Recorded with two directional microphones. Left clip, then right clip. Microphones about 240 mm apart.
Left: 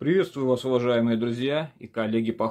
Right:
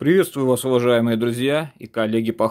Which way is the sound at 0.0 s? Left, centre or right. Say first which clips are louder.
Right 6 dB; right.